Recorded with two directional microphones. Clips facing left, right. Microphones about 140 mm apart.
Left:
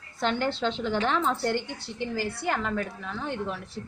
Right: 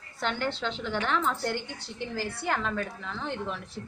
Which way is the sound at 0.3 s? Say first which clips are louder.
Left 4 dB; 30° left (ahead or behind).